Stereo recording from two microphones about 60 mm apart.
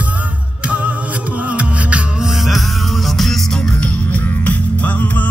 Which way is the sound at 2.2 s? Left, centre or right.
Centre.